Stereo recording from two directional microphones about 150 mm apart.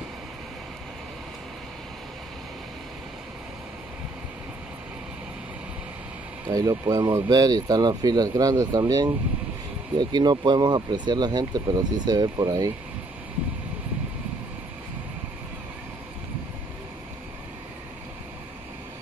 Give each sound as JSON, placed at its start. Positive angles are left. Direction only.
{"t": 6.4, "sound": "speech", "side_deg": -25}